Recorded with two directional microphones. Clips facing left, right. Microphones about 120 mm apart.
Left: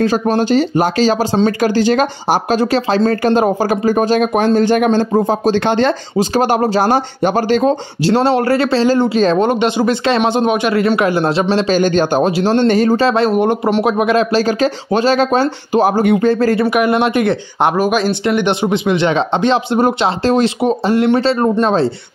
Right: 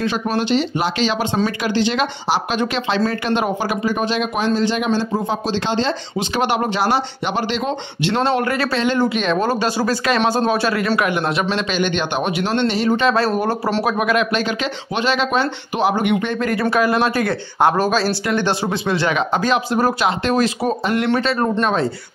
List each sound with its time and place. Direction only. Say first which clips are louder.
0.0 s speech: left 6 dB; 40° left (ahead or behind); by 5.9 s 55° left (ahead or behind)
6.1 s speech: left 5 dB; 40° left (ahead or behind)
9.5 s speech: left 5 dB; 20° left (ahead or behind); by 13.1 s 40° left (ahead or behind)
13.1 s speech: left 5 dB; 20° left (ahead or behind)